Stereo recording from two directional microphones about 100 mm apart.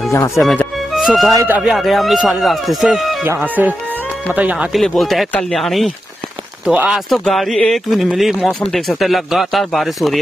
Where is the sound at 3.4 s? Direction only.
15° right (ahead or behind).